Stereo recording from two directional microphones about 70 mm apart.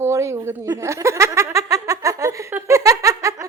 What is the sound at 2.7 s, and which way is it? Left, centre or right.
Giggle, right.